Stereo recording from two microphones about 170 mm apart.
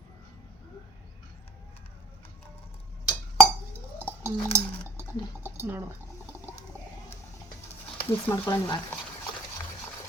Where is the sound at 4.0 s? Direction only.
15° right (ahead or behind).